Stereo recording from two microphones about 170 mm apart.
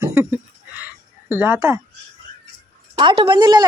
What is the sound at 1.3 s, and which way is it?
Speech, 10° right (ahead or behind).